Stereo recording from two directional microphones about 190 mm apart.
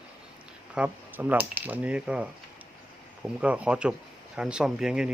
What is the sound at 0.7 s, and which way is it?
A man's voice, 5° right (ahead or behind).